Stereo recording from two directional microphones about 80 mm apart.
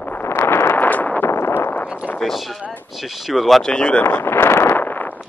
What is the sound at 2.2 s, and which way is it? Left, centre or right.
Speech, centre.